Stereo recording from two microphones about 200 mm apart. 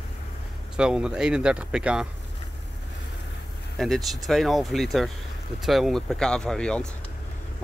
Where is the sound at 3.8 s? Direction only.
Centre (ahead or behind).